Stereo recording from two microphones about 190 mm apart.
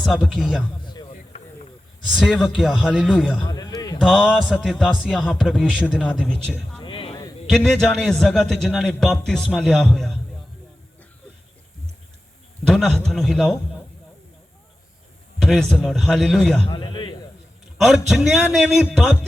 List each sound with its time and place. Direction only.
0.0 s a man's voice: centre (ahead or behind)
2.1 s a man's voice: 5° right (ahead or behind)
3.4 s a sound: 20° left (ahead or behind)
4.0 s music: 5° left (ahead or behind)
4.7 s a man's voice: centre (ahead or behind)
6.8 s a sound: 25° left (ahead or behind)
7.4 s a man's voice: 5° left (ahead or behind)
12.6 s a man's voice: centre (ahead or behind)
15.4 s a man's voice: 5° left (ahead or behind)
16.6 s a man's voice: 25° left (ahead or behind)
17.7 s a man's voice: centre (ahead or behind)